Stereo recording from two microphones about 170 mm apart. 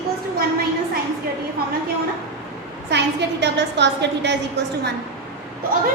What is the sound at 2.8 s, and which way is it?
A woman's voice, 90° right.